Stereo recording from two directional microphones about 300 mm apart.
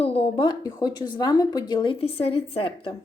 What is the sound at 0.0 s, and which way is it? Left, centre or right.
A woman's voice, centre.